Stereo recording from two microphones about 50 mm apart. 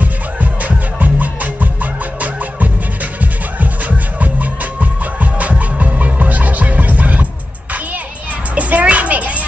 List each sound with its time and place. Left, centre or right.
0.0 s music: right
8.5 s children playing: right